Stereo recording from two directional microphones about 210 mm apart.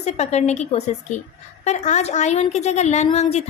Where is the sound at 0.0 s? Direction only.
30° left (ahead or behind).